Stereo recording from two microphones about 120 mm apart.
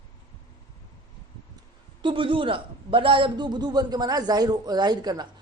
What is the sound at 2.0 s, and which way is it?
A man's voice, 45° right (ahead or behind).